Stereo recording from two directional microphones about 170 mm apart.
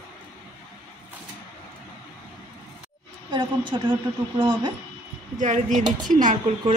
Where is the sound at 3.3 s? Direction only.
30° right (ahead or behind).